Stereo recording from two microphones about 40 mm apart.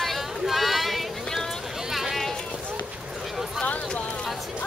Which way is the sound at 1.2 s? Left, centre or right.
Centre.